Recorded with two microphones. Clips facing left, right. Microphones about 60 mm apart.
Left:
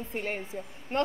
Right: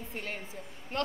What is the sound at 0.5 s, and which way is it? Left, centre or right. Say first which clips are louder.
Speech: left 5 dB; left.